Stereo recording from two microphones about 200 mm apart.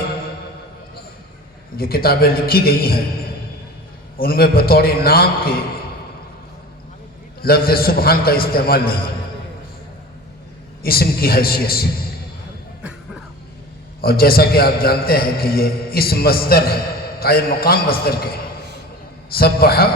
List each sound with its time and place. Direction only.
1.7 s a man's voice: 50° left (ahead or behind)
4.2 s a man's voice: 50° left (ahead or behind)
7.4 s a man's voice: 50° left (ahead or behind)
10.8 s a man's voice: 50° left (ahead or behind)
14.0 s a man's voice: 50° left (ahead or behind)